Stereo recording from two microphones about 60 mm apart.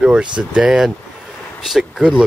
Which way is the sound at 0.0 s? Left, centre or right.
Centre.